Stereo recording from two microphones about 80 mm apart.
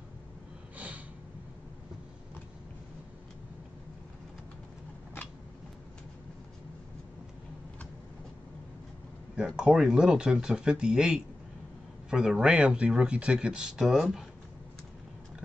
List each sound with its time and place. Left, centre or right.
0.7 s snort: centre
9.6 s speech: centre